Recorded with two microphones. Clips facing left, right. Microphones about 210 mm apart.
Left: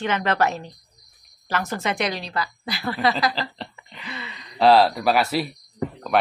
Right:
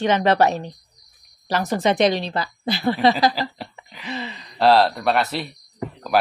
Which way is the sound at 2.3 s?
25° right (ahead or behind).